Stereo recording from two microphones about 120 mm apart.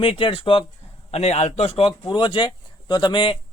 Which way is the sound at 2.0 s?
40° left (ahead or behind).